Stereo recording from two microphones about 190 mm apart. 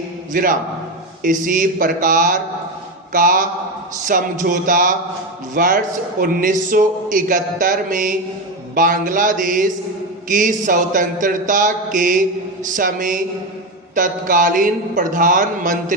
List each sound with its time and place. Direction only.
0.3 s a man's voice: 45° right (ahead or behind)